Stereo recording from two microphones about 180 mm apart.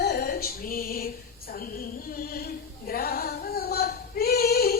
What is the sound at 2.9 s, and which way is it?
Female singing, 55° left (ahead or behind).